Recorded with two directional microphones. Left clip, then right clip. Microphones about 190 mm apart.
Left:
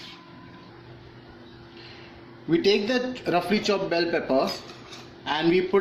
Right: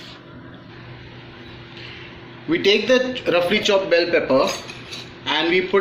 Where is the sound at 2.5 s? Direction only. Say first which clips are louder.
Right 6 dB; 45° left (ahead or behind).